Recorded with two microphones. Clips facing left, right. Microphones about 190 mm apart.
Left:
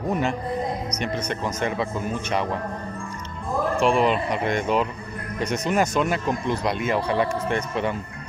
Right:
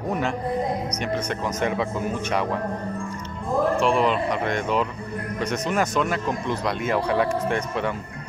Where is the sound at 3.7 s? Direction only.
10° left (ahead or behind).